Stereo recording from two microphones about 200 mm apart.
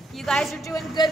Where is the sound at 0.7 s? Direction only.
20° left (ahead or behind).